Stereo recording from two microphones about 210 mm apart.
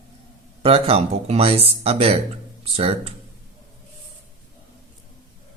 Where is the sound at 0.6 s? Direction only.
30° right (ahead or behind).